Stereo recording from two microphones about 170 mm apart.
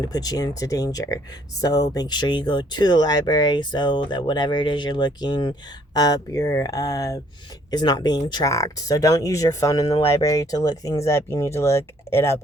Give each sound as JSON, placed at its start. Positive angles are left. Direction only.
{"t": 0.0, "sound": "speech", "side_deg": 20}